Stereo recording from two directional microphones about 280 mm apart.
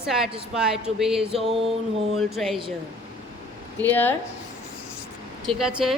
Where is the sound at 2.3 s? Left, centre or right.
Centre.